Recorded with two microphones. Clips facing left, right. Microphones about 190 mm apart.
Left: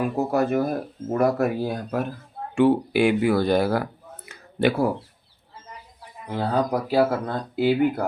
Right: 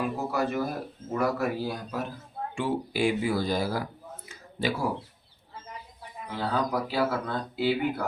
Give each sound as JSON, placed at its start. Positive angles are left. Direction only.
{"t": 0.3, "sound": "speech", "side_deg": 55}
{"t": 4.3, "sound": "a sound", "side_deg": 60}
{"t": 6.3, "sound": "speech", "side_deg": 45}